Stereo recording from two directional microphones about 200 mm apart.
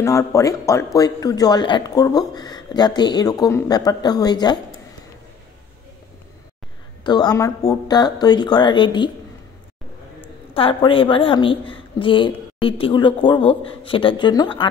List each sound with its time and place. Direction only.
0.0 s a woman's voice: 15° left (ahead or behind)
7.1 s a woman's voice: 20° left (ahead or behind)
10.5 s a woman's voice: 25° left (ahead or behind)